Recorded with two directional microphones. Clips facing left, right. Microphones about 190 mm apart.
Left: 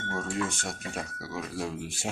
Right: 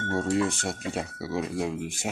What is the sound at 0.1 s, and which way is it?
Speech, 30° right (ahead or behind).